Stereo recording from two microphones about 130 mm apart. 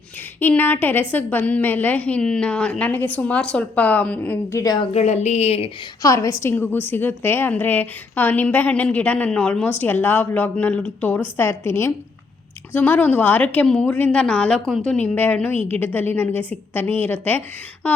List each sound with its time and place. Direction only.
0.3 s a woman's voice: 15° left (ahead or behind)
4.6 s a woman's voice: 30° left (ahead or behind)
4.9 s a woman's voice: 60° left (ahead or behind)
6.0 s a woman's voice: 25° left (ahead or behind)